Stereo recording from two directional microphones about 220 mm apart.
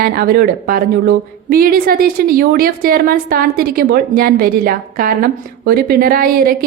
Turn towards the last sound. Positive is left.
turn(degrees=-40)  # may be behind; listen again after turning